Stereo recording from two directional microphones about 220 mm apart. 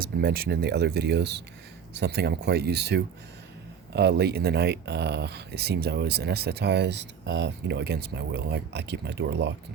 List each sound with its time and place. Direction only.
0.0 s speech: 45° right (ahead or behind)